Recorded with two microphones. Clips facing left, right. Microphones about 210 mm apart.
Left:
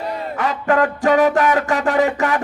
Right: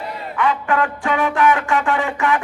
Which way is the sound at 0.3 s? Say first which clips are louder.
Left 1 dB; 40° left (ahead or behind).